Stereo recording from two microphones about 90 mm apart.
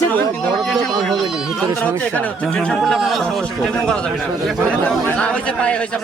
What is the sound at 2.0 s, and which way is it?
A man's voice, 15° left (ahead or behind).